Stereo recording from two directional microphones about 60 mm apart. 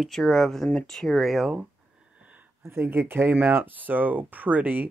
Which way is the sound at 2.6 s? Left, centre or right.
Right.